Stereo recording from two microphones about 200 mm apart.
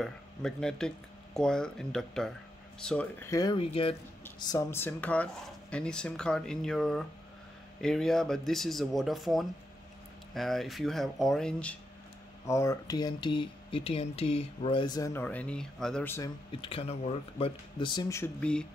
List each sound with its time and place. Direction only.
0.0 s speech: 5° left (ahead or behind); by 3.9 s 30° left (ahead or behind)
4.4 s speech: 15° left (ahead or behind)
12.4 s speech: 15° left (ahead or behind)
16.6 s speech: 30° left (ahead or behind); by 18.7 s 5° left (ahead or behind)